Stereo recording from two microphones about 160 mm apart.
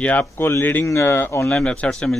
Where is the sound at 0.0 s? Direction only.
10° left (ahead or behind).